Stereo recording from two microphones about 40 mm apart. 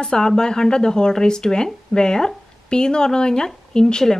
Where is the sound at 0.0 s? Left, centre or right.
Centre.